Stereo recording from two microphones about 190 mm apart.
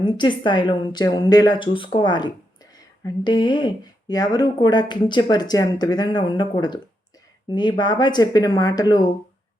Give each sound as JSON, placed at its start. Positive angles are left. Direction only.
{"t": 0.0, "sound": "speech", "side_deg": 25}